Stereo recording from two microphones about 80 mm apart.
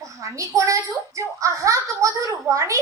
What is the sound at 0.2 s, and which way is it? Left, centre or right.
A woman's voice, right.